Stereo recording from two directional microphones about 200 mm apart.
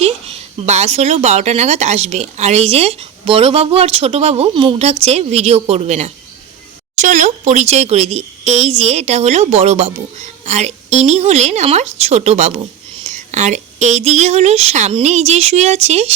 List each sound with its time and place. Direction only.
0.0 s speech: 35° right (ahead or behind)